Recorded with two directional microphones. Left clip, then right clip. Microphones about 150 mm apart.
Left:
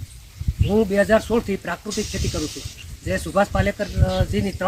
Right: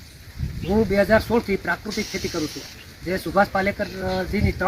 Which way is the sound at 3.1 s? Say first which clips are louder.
Even; 15° left (ahead or behind).